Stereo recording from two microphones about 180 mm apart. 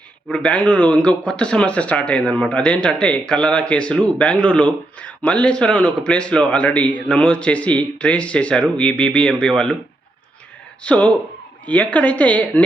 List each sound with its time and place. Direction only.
0.3 s speech: 5° left (ahead or behind)
10.8 s speech: 5° left (ahead or behind)